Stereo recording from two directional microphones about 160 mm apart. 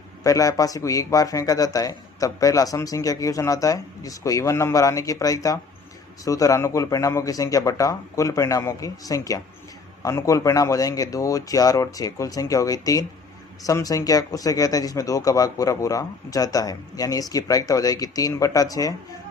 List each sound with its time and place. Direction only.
0.2 s a man's voice: 20° left (ahead or behind)